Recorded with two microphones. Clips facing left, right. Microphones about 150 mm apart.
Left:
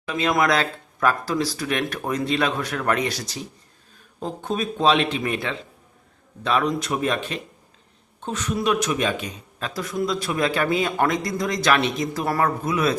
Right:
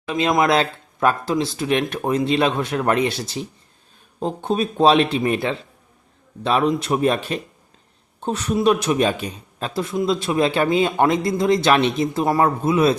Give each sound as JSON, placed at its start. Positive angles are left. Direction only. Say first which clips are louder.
{"t": 0.1, "sound": "speech", "louder": "right 3 dB", "side_deg": -25}